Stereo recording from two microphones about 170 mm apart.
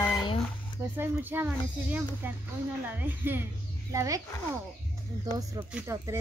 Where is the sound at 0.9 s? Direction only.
10° right (ahead or behind).